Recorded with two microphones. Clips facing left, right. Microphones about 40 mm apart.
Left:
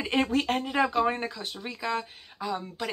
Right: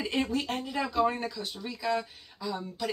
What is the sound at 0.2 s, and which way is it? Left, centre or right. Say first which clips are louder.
Speech: left 7 dB; left.